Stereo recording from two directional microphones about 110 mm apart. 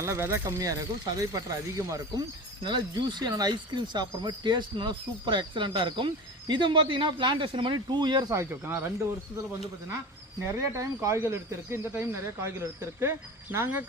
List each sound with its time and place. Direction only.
0.0 s speech: 25° right (ahead or behind)
2.6 s speech: 45° right (ahead or behind)
8.3 s speech: 25° right (ahead or behind)
10.4 s speech: 25° right (ahead or behind)